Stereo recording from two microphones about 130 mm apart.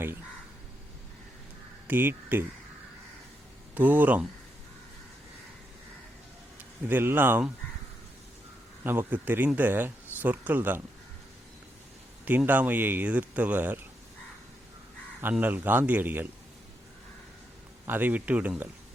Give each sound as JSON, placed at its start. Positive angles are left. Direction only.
{"t": 1.9, "sound": "speech", "side_deg": -15}
{"t": 3.8, "sound": "speech", "side_deg": -15}
{"t": 6.8, "sound": "speech", "side_deg": -20}
{"t": 8.8, "sound": "speech", "side_deg": -15}
{"t": 12.2, "sound": "speech", "side_deg": -15}
{"t": 15.2, "sound": "speech", "side_deg": -15}
{"t": 17.8, "sound": "speech", "side_deg": -15}